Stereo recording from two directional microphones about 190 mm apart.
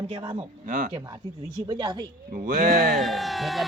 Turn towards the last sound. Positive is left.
turn(degrees=0)  # may be behind; listen again after turning